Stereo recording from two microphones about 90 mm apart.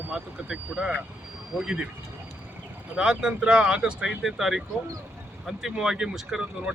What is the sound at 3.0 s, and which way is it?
Speech, 10° right (ahead or behind).